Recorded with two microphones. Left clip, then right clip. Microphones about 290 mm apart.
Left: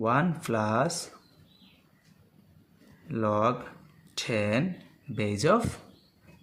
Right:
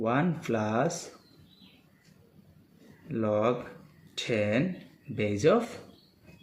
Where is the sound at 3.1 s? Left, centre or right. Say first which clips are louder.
Left 1 dB; left.